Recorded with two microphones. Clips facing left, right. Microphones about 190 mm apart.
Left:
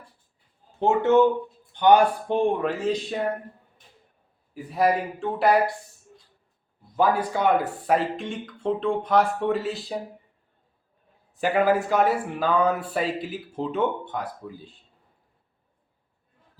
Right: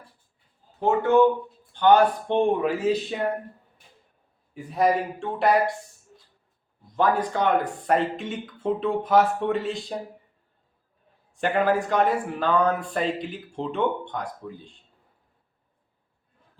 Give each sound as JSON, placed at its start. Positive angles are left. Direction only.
{"t": 0.8, "sound": "speech", "side_deg": 25}
{"t": 1.7, "sound": "speech", "side_deg": 15}
{"t": 2.3, "sound": "a man's voice", "side_deg": -5}
{"t": 4.5, "sound": "a man's voice", "side_deg": 0}
{"t": 6.9, "sound": "a man's voice", "side_deg": 10}
{"t": 11.3, "sound": "a man's voice", "side_deg": 5}